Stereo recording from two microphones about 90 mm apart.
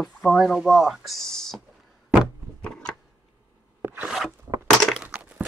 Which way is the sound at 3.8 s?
25° right (ahead or behind).